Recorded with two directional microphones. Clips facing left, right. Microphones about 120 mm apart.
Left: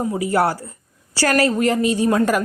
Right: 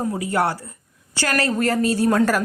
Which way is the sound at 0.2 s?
25° left (ahead or behind).